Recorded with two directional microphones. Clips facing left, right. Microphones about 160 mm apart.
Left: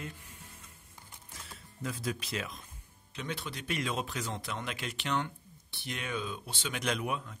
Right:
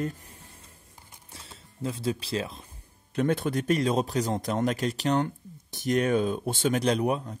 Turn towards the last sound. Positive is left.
turn(degrees=-35)  # may be behind; listen again after turning